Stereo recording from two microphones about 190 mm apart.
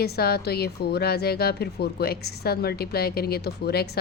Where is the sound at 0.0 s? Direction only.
55° left (ahead or behind).